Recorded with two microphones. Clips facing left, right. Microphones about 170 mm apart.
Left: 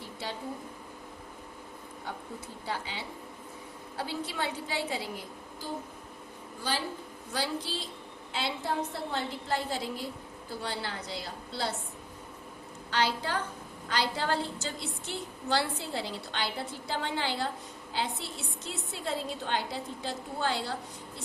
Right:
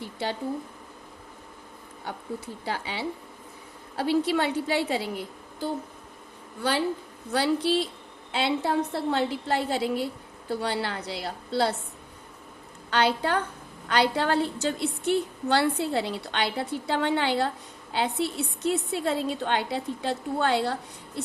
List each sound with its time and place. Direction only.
2.6 s a woman's voice: 70° right (ahead or behind)
6.6 s a woman's voice: 65° right (ahead or behind)
12.9 s a woman's voice: 65° right (ahead or behind)